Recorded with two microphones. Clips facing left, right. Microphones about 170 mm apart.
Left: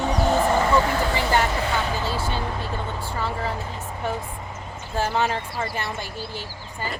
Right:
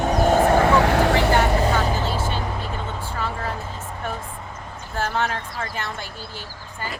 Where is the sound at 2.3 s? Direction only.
15° left (ahead or behind).